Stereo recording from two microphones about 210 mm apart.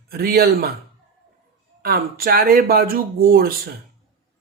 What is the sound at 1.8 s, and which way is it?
Speech, 45° right (ahead or behind).